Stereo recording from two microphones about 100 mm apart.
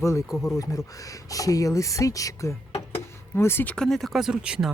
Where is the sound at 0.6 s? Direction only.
35° left (ahead or behind).